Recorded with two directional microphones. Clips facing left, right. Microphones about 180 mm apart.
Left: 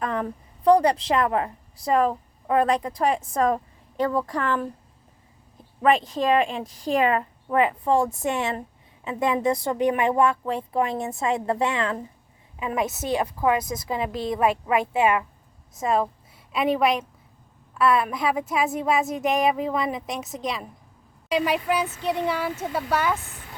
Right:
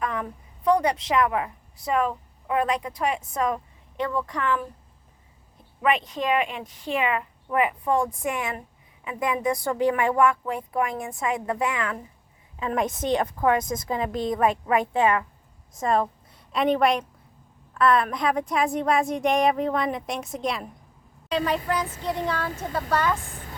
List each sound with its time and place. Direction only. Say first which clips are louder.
0.0 s a woman's voice: left 2 dB; 35° left (ahead or behind)
5.8 s a woman's voice: left 4 dB; 35° left (ahead or behind)
12.5 s a woman's voice: even; 10° left (ahead or behind)
21.2 s a woman's voice: left 2 dB; 10° left (ahead or behind)